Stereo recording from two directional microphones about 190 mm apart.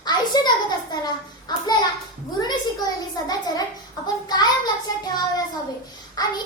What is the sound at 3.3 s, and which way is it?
A child's voice, 20° left (ahead or behind).